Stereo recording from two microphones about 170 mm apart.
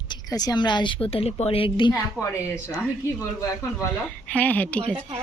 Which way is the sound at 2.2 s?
15° left (ahead or behind).